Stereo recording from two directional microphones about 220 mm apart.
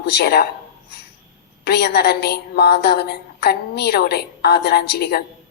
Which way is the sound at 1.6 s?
50° left (ahead or behind).